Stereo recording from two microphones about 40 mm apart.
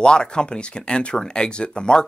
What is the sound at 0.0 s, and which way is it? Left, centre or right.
Speech, left.